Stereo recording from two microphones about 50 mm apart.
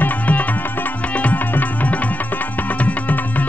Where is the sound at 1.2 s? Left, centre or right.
Left.